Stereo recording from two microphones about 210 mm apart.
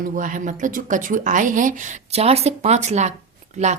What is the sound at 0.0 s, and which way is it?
A woman's voice, 40° right (ahead or behind).